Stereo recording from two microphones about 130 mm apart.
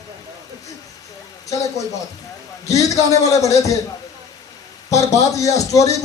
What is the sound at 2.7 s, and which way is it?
A man's voice, 25° left (ahead or behind).